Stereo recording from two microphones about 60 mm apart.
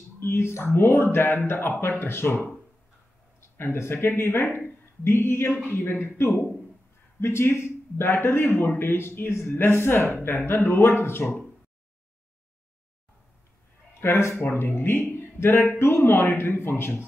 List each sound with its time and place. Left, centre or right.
0.2 s a man's voice: left
13.9 s speech: left